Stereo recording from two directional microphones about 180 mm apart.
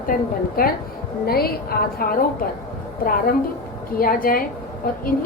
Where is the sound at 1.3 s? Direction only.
60° left (ahead or behind).